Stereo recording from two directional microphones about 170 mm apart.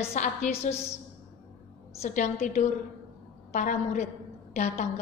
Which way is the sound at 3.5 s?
45° left (ahead or behind).